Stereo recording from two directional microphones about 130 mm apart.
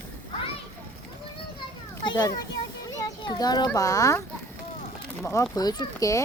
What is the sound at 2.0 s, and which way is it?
A child's voice, 30° left (ahead or behind).